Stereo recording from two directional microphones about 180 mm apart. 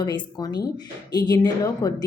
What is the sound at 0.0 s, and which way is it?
A woman's voice, 25° left (ahead or behind).